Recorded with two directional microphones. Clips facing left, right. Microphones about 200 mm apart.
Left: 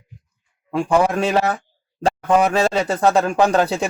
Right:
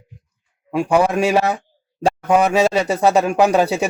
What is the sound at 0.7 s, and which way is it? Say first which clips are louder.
A man's voice: right 1 dB; 10° right (ahead or behind).